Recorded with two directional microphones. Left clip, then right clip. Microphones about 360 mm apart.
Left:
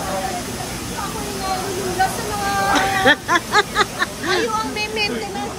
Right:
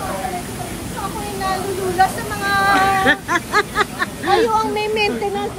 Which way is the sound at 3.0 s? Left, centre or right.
Centre.